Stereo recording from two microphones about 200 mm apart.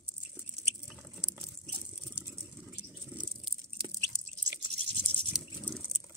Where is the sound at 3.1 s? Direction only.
5° right (ahead or behind).